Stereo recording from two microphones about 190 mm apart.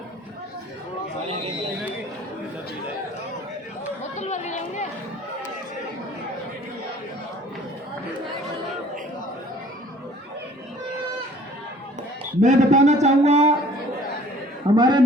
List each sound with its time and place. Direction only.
4.2 s chatter: 40° left (ahead or behind)
12.4 s a man's voice: 40° right (ahead or behind)
14.8 s a man's voice: 25° right (ahead or behind)